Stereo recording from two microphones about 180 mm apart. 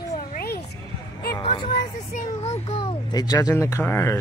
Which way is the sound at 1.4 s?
25° left (ahead or behind).